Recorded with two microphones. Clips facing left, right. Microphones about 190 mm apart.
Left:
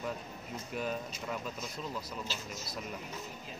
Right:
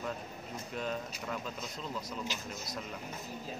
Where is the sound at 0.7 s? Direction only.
5° left (ahead or behind).